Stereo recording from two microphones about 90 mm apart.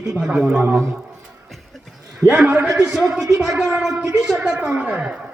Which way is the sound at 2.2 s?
10° right (ahead or behind).